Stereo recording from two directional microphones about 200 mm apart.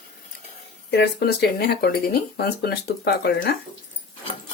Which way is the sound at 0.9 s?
55° left (ahead or behind).